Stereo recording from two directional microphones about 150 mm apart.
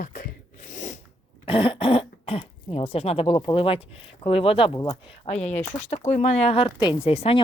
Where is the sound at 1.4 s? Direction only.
35° left (ahead or behind).